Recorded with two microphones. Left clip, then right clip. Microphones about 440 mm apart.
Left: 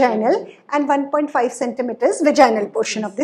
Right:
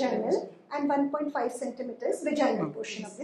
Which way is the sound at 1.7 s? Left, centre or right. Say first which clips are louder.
Left 13 dB; left.